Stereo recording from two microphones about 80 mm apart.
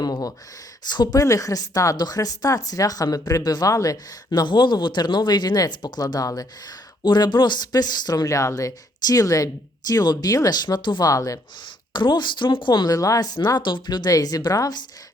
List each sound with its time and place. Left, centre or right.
0.0 s a sound: left
0.9 s speech: left
2.0 s speech: left
4.3 s speech: left
5.7 s speech: left
7.0 s speech: left
11.0 s speech: left
11.9 s speech: left
12.9 s speech: left
13.6 s speech: left